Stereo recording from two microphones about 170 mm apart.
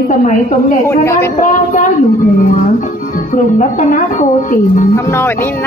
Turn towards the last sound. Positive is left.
turn(degrees=15)  # may be behind; listen again after turning